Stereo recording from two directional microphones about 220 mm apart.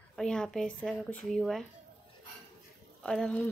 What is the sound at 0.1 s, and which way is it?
A woman's voice, 5° left (ahead or behind).